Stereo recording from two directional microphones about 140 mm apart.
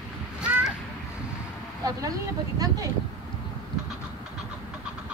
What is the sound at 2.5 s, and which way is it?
Speech, 25° right (ahead or behind).